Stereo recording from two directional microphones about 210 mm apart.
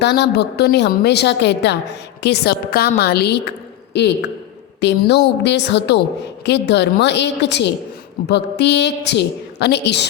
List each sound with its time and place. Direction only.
0.0 s a woman's voice: 55° left (ahead or behind)